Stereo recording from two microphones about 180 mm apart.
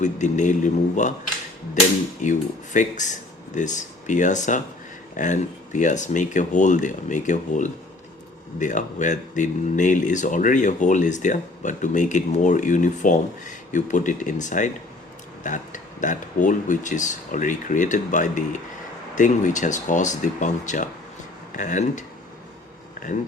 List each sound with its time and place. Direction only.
0.0 s speech: 40° left (ahead or behind)
2.2 s speech: 45° left (ahead or behind)